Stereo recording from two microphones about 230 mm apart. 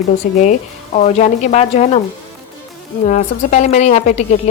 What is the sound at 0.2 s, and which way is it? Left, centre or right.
A woman's voice, left.